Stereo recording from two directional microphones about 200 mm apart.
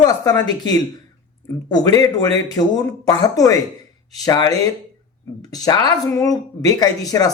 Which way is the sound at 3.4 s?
15° left (ahead or behind).